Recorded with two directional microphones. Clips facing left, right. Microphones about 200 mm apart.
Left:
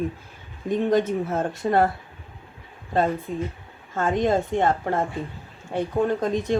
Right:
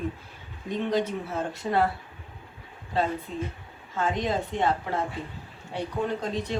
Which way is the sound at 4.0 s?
50° left (ahead or behind).